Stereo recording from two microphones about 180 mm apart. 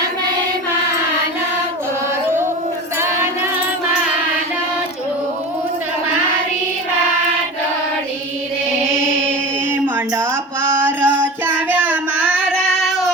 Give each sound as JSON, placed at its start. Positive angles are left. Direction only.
{"t": 9.8, "sound": "music", "side_deg": -15}
{"t": 11.7, "sound": "child singing", "side_deg": -10}